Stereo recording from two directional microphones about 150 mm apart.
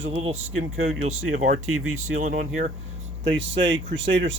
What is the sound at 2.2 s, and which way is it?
Speech, 55° right (ahead or behind).